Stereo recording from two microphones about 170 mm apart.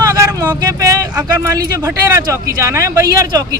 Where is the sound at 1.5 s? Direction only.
20° right (ahead or behind).